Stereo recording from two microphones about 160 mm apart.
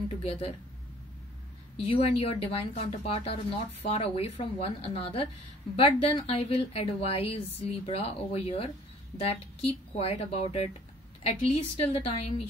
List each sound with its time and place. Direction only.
0.2 s a woman's voice: 40° left (ahead or behind)
1.8 s a woman's voice: 40° left (ahead or behind)